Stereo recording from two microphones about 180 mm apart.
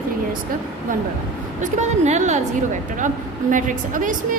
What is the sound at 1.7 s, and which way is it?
Speech, 40° right (ahead or behind).